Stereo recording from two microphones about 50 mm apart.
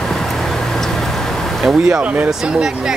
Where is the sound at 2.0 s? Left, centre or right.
Right.